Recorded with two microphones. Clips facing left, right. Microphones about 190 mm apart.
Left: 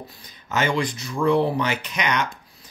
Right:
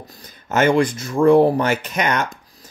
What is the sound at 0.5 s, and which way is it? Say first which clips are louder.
Speech: right 7 dB; 50° right (ahead or behind).